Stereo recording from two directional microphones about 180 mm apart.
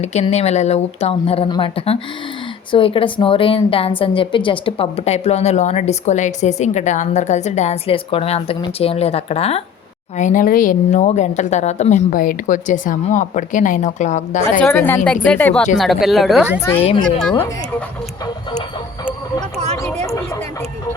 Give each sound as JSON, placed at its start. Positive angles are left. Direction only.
{"t": 0.0, "sound": "a woman's voice", "side_deg": 40}
{"t": 10.2, "sound": "a woman's voice", "side_deg": 45}
{"t": 14.6, "sound": "speech", "side_deg": 10}
{"t": 20.1, "sound": "a sound", "side_deg": 15}